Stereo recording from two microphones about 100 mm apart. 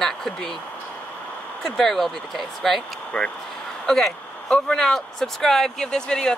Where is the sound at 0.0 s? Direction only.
5° left (ahead or behind).